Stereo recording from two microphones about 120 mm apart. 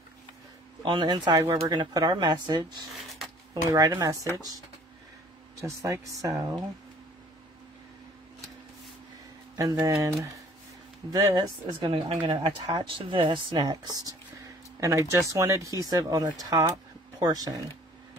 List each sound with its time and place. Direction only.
0.8 s speech: 40° right (ahead or behind)
2.9 s a sound: centre (ahead or behind)
3.7 s speech: 30° right (ahead or behind)
5.6 s speech: 25° right (ahead or behind)
9.6 s speech: 30° right (ahead or behind)